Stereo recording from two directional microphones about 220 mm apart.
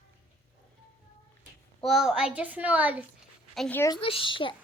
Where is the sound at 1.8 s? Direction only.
Centre (ahead or behind).